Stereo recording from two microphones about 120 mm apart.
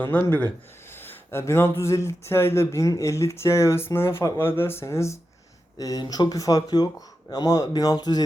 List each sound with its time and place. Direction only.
0.1 s speech: 10° left (ahead or behind)
5.7 s speech: 35° left (ahead or behind)